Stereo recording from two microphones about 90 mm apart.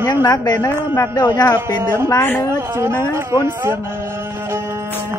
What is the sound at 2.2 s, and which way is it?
Speech, 20° left (ahead or behind).